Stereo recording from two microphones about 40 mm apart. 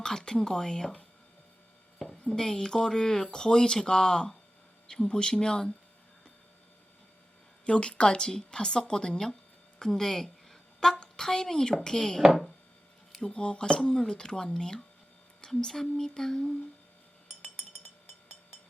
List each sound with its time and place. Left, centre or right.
0.0 s speech: centre
2.2 s a woman's voice: centre
7.6 s a woman's voice: left
13.3 s a woman's voice: left
13.7 s speech: centre